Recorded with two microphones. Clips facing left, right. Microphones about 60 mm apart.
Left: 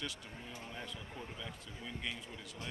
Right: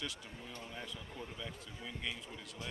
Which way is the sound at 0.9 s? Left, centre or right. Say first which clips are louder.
Even; centre.